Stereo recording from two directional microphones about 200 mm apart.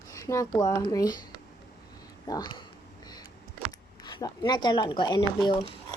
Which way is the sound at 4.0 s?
20° left (ahead or behind).